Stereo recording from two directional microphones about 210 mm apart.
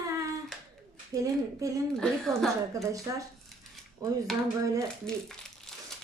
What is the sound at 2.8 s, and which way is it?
A woman's voice, 15° right (ahead or behind).